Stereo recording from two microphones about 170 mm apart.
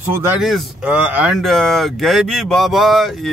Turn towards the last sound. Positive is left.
turn(degrees=0)  # may be behind; listen again after turning